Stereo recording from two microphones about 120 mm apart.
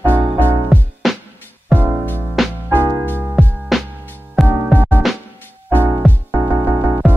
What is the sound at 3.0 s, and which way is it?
Music, 20° right (ahead or behind).